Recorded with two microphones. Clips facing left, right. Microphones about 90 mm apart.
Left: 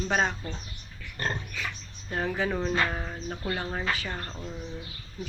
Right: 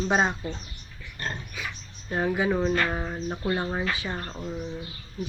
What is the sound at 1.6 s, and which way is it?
A woman's voice, 10° right (ahead or behind).